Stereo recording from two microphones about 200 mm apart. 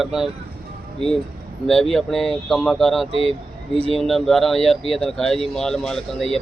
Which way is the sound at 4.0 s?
Centre (ahead or behind).